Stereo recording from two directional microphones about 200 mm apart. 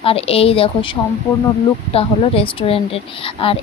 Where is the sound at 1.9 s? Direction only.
30° left (ahead or behind).